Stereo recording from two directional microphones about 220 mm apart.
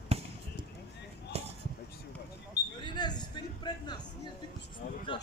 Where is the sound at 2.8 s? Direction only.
20° left (ahead or behind).